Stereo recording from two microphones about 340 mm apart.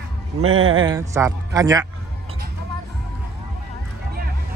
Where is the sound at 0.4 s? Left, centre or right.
Right.